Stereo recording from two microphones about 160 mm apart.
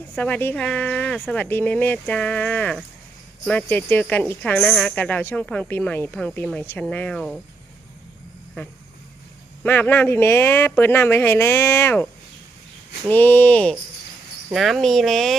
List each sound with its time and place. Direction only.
0.2 s a woman's voice: 10° left (ahead or behind)
9.6 s a woman's voice: 10° left (ahead or behind)
13.1 s a woman's voice: 10° left (ahead or behind)